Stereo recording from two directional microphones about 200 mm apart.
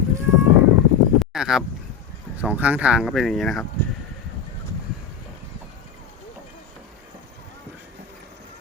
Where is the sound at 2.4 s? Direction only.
5° right (ahead or behind).